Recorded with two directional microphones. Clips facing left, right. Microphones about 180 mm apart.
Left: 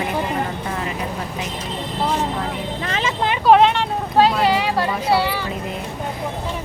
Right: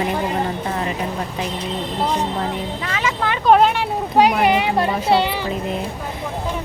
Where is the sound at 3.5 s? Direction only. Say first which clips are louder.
Left 1 dB; centre (ahead or behind); by 5.5 s 20° right (ahead or behind).